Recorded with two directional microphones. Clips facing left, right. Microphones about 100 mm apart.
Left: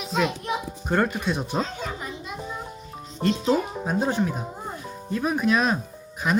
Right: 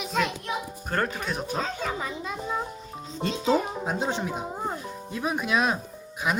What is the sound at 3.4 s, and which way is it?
Speech, 15° right (ahead or behind).